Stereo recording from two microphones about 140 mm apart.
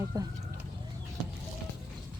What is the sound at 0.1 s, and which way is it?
Vehicle, 25° right (ahead or behind).